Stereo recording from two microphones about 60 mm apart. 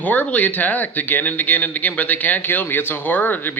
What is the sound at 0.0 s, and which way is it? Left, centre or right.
Speech, left.